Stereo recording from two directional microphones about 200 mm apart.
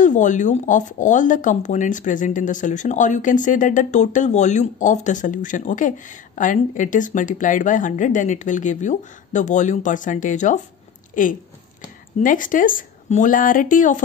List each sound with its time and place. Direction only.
0.0 s speech: 40° left (ahead or behind)